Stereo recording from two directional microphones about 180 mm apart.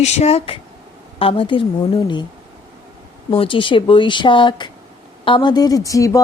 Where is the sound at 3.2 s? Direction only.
30° left (ahead or behind).